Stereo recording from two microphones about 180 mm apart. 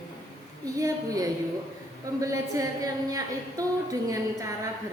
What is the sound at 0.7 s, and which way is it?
A woman's voice, 20° right (ahead or behind).